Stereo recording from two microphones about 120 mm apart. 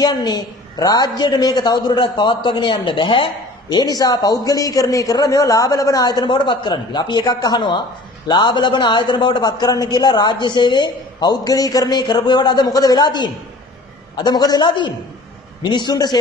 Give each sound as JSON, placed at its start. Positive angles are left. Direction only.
{"t": 0.0, "sound": "a man's voice", "side_deg": 35}